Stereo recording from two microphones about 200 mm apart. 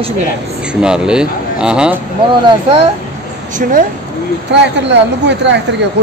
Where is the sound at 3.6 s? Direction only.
45° right (ahead or behind).